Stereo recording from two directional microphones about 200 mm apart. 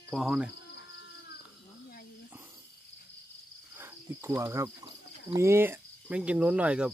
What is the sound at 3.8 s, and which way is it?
Speech, 10° right (ahead or behind).